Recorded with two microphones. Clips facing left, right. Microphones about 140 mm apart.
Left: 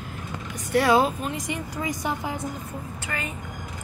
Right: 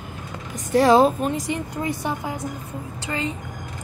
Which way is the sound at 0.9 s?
40° right (ahead or behind).